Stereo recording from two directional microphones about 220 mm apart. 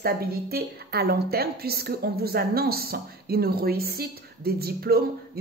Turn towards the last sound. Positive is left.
turn(degrees=-45)  # may be behind; listen again after turning